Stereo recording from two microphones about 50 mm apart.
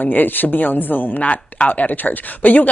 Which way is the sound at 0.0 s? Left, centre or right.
Left.